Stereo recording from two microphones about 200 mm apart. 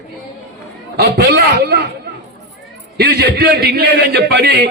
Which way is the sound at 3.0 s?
55° right (ahead or behind).